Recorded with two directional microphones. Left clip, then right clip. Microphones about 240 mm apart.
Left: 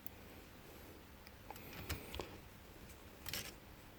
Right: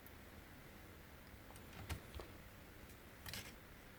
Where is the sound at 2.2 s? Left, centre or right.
Left.